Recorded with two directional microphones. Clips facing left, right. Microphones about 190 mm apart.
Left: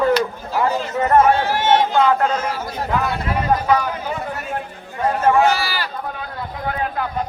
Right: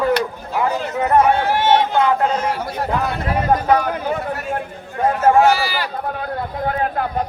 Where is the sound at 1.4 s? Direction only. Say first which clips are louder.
Right 1 dB; 60° right (ahead or behind).